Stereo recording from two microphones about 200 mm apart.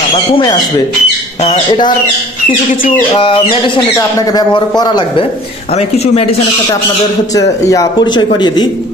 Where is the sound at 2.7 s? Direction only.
45° left (ahead or behind).